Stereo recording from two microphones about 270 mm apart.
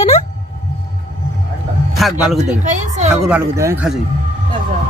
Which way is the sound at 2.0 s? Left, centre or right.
Centre.